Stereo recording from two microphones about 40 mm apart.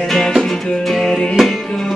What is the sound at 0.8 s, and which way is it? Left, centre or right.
Music, centre.